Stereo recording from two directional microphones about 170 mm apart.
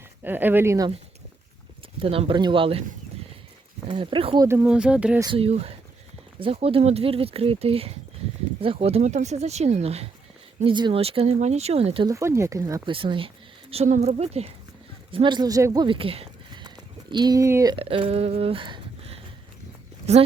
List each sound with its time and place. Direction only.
0.3 s speech: 10° right (ahead or behind)
2.0 s speech: 35° right (ahead or behind)
3.8 s speech: 30° right (ahead or behind)
4.4 s speech: 15° right (ahead or behind)
5.2 s speech: 30° right (ahead or behind)
12.0 s speech: 15° right (ahead or behind)
12.9 s speech: 30° right (ahead or behind)
17.7 s speech: 35° right (ahead or behind)